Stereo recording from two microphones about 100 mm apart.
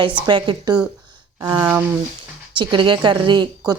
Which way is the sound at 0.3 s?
55° right (ahead or behind).